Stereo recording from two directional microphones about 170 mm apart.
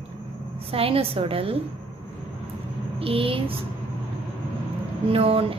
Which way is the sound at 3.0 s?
35° right (ahead or behind).